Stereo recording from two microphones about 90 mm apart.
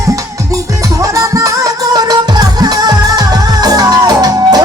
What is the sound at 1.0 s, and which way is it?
Music, 40° right (ahead or behind).